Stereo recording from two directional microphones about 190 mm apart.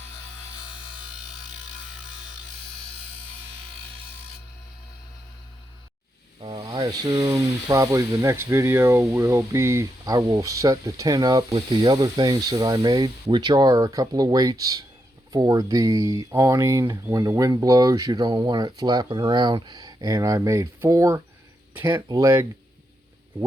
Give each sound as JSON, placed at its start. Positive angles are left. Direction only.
{"t": 6.4, "sound": "speech", "side_deg": -25}